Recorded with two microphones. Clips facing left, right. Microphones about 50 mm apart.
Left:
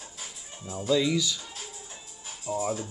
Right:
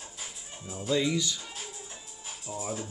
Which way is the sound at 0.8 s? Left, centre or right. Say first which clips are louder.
Left 3 dB; right.